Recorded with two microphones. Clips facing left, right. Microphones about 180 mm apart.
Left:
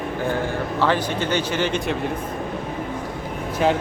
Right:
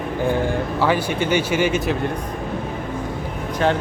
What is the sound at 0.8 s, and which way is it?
Speech, 10° right (ahead or behind).